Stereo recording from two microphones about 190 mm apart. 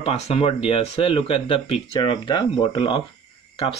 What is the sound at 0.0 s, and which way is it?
Speech, 30° left (ahead or behind).